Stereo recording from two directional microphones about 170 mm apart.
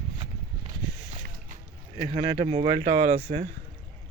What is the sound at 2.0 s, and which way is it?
Speech, 30° right (ahead or behind).